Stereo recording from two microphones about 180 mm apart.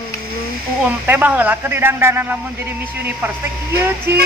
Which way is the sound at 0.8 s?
10° right (ahead or behind).